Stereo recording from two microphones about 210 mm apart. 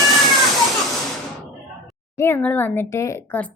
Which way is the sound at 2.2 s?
10° left (ahead or behind).